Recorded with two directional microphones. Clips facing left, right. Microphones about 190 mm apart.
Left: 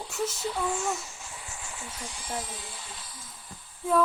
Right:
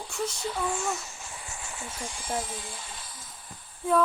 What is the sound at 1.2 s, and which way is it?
Speech, 50° right (ahead or behind).